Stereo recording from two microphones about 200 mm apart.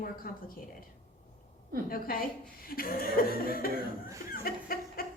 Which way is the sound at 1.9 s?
45° left (ahead or behind).